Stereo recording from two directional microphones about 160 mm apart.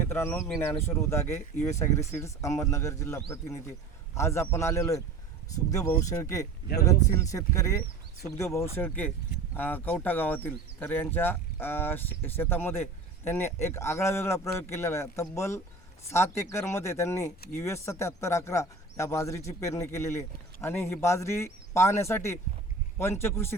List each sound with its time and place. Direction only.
0.1 s speech: 15° left (ahead or behind)